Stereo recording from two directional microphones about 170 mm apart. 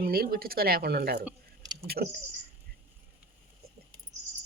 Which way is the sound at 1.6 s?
25° right (ahead or behind).